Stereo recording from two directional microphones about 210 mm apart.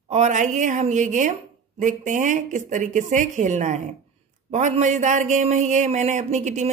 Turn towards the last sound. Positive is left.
turn(degrees=-35)  # may be behind; listen again after turning